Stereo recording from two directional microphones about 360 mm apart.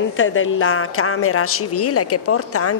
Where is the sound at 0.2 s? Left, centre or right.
Left.